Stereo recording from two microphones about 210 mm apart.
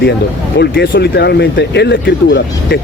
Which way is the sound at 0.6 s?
55° left (ahead or behind).